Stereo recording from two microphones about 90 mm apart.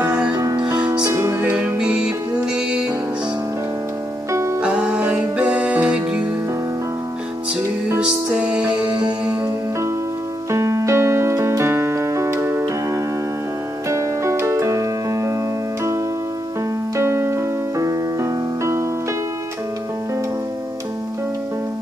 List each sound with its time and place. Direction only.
0.6 s music: 55° right (ahead or behind)
1.1 s music: 25° right (ahead or behind); by 2.9 s 10° right (ahead or behind)
4.3 s music: 35° right (ahead or behind)
4.6 s music: 10° right (ahead or behind)
8.0 s music: 10° right (ahead or behind)
10.5 s keyboard: 35° right (ahead or behind)
13.8 s music: 35° right (ahead or behind)
16.9 s music: 30° right (ahead or behind)